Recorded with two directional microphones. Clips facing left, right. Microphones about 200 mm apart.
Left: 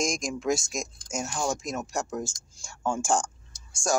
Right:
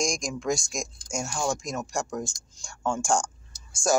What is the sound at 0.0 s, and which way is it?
Speech, 5° left (ahead or behind).